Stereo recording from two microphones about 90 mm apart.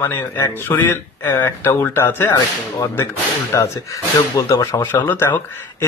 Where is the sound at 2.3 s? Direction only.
40° left (ahead or behind).